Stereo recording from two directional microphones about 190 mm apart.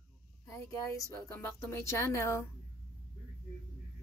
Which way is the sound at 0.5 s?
15° left (ahead or behind).